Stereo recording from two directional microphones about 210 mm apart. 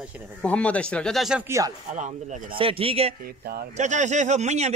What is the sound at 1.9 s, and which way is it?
A man's voice, 35° right (ahead or behind).